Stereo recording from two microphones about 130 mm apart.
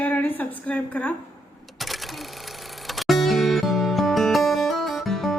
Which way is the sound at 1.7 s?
Centre (ahead or behind).